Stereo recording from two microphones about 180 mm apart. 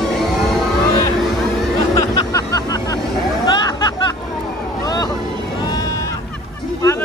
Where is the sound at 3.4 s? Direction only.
20° left (ahead or behind).